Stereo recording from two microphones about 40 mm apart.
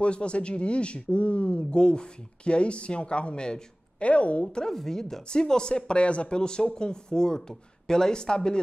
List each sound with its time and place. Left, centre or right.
0.0 s speech: left
4.0 s speech: left
4.7 s speech: centre